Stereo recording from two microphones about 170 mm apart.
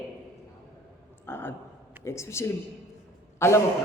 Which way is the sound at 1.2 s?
15° left (ahead or behind).